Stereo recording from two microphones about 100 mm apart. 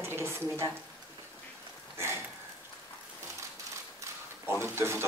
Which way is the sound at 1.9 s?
25° right (ahead or behind).